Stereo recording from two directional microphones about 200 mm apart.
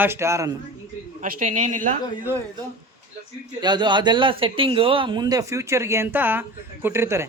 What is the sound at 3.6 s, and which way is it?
A man's voice, 20° right (ahead or behind).